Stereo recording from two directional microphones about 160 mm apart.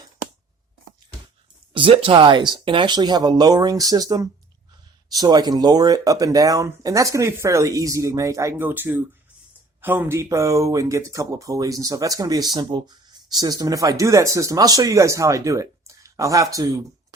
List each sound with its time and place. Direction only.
1.7 s speech: 35° right (ahead or behind)